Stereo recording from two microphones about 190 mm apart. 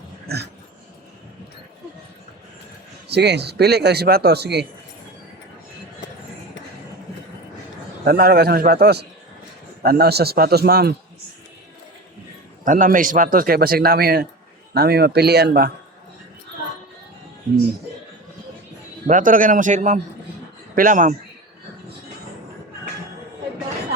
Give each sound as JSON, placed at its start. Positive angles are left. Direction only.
{"t": 0.3, "sound": "a man's voice", "side_deg": -55}
{"t": 3.1, "sound": "a man's voice", "side_deg": -60}
{"t": 8.0, "sound": "a man's voice", "side_deg": -50}
{"t": 12.6, "sound": "a man's voice", "side_deg": -45}
{"t": 19.0, "sound": "a man's voice", "side_deg": -45}